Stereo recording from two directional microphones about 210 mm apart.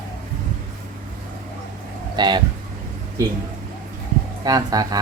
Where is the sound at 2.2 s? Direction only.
20° right (ahead or behind).